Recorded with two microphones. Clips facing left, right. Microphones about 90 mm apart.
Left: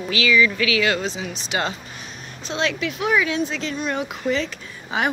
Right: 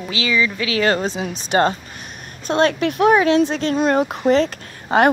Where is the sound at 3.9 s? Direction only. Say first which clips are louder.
Right 8 dB; 45° right (ahead or behind).